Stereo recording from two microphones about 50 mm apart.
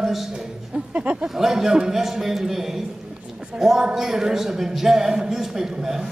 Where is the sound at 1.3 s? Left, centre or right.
Centre.